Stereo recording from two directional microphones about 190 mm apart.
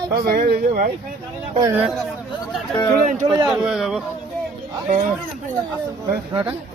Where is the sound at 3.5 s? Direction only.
Centre (ahead or behind).